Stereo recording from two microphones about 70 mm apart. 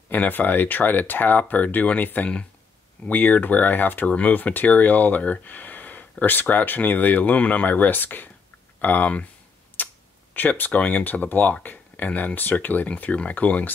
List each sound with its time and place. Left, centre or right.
0.1 s speech: left
9.8 s a sound: left
10.3 s speech: left